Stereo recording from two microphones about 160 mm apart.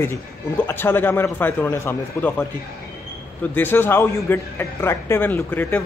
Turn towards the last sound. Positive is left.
turn(degrees=10)  # may be behind; listen again after turning